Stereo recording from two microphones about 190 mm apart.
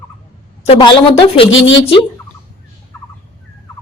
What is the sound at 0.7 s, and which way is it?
Speech, 25° left (ahead or behind).